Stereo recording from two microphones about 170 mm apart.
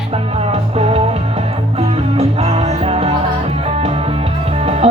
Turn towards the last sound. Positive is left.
turn(degrees=-35)  # may be behind; listen again after turning